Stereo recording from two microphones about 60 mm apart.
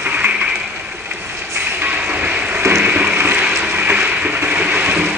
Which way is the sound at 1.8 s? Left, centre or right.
Right.